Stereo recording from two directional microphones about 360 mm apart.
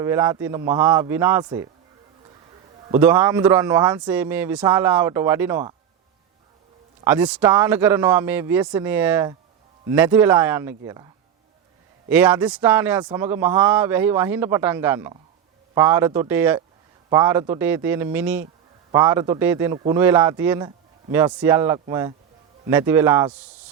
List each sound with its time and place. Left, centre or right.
0.0 s a man's voice: centre
2.9 s a man's voice: centre
7.0 s a man's voice: centre